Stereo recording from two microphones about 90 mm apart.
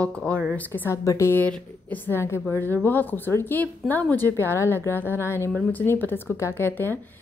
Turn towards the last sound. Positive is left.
turn(degrees=25)  # may be behind; listen again after turning